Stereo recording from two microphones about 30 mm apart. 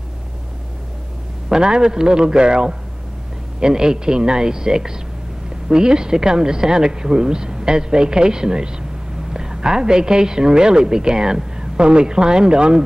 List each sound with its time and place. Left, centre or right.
1.5 s a woman's voice: right